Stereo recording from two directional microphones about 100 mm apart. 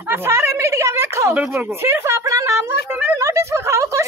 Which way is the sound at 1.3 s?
15° right (ahead or behind).